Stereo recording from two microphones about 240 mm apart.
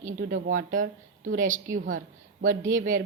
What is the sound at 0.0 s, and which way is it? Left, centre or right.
Speech, right.